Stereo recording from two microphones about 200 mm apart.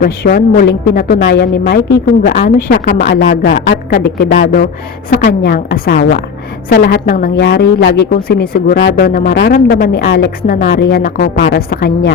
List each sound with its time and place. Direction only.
0.0 s a woman's voice: 50° left (ahead or behind)